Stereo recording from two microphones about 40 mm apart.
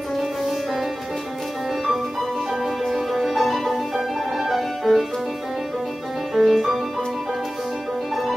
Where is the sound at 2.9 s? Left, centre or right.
Centre.